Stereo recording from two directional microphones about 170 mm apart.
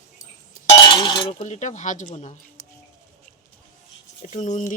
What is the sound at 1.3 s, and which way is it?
Speech, 45° left (ahead or behind).